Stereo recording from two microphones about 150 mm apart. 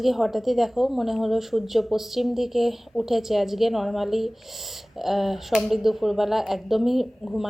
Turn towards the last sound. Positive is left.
turn(degrees=0)  # may be behind; listen again after turning